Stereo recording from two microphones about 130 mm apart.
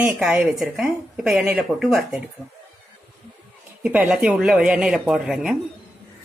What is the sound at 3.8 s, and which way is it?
Speech, 10° right (ahead or behind).